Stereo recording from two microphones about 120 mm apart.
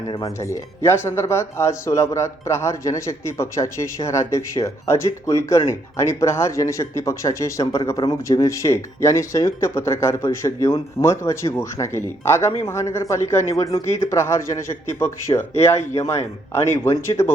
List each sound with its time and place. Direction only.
0.1 s speech: 25° left (ahead or behind)
16.8 s speech: 25° left (ahead or behind)